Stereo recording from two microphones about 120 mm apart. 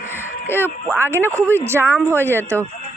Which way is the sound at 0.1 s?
20° left (ahead or behind).